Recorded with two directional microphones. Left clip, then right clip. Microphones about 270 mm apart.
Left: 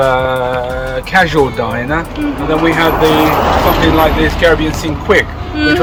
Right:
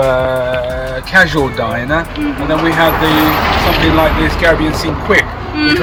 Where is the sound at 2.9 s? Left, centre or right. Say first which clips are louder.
Left 2 dB; left.